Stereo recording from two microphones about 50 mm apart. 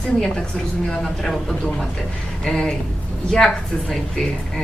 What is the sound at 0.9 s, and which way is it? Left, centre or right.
A man's voice, centre.